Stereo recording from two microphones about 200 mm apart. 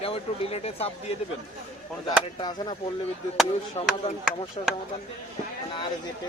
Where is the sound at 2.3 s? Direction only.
25° left (ahead or behind).